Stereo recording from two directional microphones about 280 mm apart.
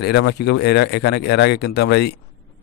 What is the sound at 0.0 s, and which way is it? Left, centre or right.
Speech, left.